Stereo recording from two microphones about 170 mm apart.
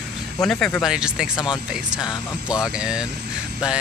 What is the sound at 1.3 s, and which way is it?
Speech, 25° left (ahead or behind).